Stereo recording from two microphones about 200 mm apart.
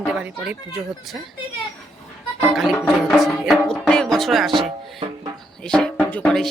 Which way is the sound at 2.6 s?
Centre (ahead or behind).